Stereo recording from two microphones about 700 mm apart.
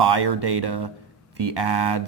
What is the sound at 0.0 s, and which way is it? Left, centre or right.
A man's voice, right.